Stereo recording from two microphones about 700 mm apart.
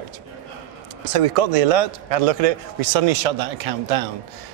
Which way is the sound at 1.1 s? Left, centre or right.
Right.